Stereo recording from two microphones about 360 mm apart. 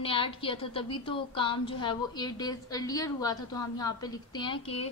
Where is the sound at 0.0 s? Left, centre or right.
Centre.